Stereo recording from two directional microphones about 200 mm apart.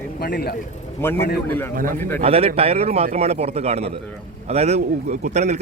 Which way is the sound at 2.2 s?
30° right (ahead or behind).